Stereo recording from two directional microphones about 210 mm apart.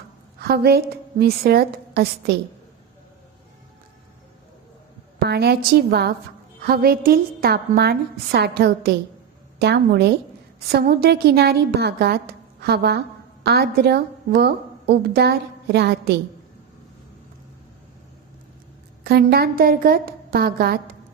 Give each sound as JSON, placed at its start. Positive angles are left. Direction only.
{"t": 0.4, "sound": "a woman's voice", "side_deg": -50}
{"t": 5.3, "sound": "a woman's voice", "side_deg": -50}
{"t": 19.0, "sound": "a woman's voice", "side_deg": -50}